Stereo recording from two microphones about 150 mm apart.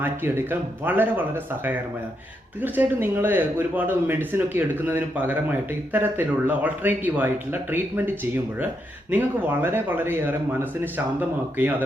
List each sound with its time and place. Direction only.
0.9 s speech: 10° right (ahead or behind)
2.6 s speech: 10° right (ahead or behind)